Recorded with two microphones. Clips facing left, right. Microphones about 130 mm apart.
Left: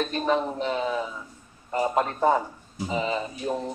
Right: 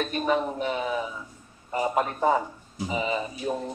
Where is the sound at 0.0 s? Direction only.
5° right (ahead or behind).